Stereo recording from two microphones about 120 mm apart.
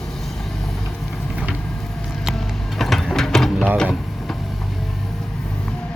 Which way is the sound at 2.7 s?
Centre (ahead or behind).